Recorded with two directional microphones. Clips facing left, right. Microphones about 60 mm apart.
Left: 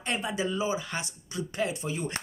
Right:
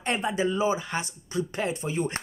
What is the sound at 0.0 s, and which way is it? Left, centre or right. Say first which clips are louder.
Speech: right 4 dB; right.